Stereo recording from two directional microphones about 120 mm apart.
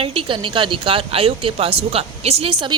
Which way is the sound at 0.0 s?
50° right (ahead or behind).